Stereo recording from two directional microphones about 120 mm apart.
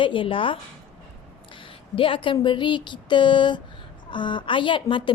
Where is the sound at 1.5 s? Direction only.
45° left (ahead or behind).